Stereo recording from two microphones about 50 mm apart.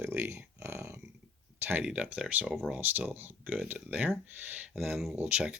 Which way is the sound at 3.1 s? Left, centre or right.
Right.